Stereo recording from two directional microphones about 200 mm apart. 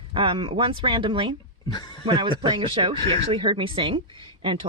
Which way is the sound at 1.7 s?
20° left (ahead or behind).